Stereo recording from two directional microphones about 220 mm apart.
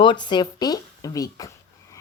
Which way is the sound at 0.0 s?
20° left (ahead or behind).